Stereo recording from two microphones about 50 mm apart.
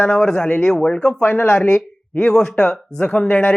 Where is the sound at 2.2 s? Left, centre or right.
Centre.